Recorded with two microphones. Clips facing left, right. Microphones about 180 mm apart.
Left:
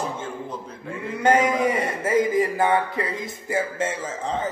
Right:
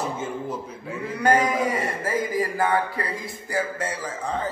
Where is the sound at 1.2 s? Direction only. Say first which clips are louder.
Left 2 dB; 25° left (ahead or behind).